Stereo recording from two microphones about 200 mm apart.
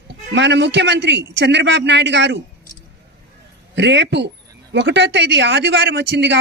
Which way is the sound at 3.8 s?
60° right (ahead or behind).